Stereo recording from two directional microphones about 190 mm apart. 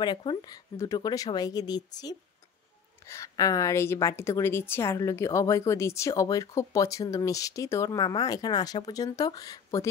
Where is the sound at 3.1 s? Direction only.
20° left (ahead or behind).